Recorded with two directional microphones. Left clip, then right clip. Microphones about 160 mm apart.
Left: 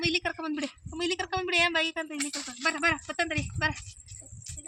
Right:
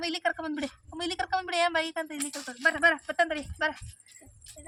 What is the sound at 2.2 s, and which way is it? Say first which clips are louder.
Speech: left 2 dB; 40° right (ahead or behind).